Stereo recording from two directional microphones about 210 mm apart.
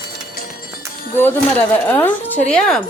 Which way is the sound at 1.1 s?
10° left (ahead or behind).